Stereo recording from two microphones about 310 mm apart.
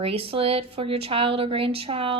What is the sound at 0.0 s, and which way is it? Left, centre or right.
Speech, centre.